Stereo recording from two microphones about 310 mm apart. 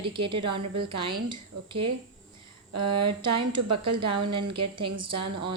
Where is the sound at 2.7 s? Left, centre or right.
Right.